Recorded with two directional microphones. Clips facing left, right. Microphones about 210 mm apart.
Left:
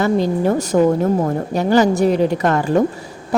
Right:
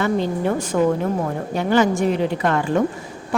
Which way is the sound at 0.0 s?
40° left (ahead or behind).